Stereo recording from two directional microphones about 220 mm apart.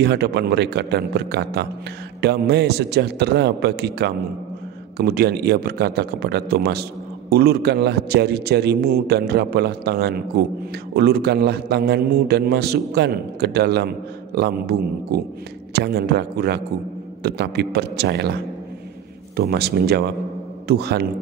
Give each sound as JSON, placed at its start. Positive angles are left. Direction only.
{"t": 0.0, "sound": "a man's voice", "side_deg": -50}
{"t": 19.3, "sound": "a man's voice", "side_deg": -45}